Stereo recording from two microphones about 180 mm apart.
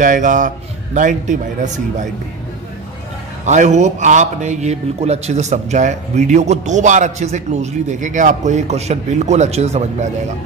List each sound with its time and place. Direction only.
0.0 s speech: 45° right (ahead or behind)
3.4 s a man's voice: 40° right (ahead or behind)